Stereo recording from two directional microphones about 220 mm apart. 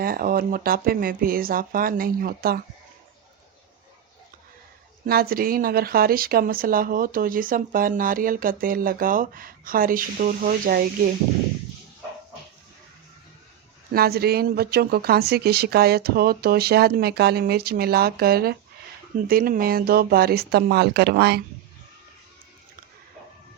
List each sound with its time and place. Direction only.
0.0 s speech: 40° right (ahead or behind)
5.0 s speech: 45° right (ahead or behind)
13.9 s speech: 45° right (ahead or behind)